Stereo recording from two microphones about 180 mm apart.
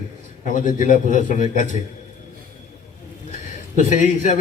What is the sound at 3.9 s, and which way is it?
Speech, 45° left (ahead or behind).